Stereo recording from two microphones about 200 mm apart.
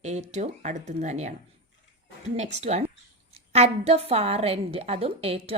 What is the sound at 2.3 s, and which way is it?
A woman's voice, 35° right (ahead or behind).